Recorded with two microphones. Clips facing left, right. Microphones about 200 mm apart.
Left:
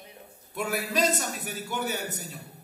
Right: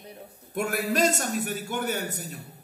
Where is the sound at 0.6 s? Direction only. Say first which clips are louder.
Right 3 dB; 50° right (ahead or behind).